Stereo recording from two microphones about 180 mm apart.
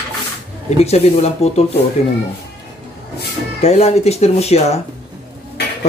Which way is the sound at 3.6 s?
35° left (ahead or behind).